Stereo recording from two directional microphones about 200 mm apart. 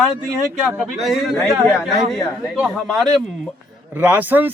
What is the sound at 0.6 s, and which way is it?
A man's voice, centre (ahead or behind).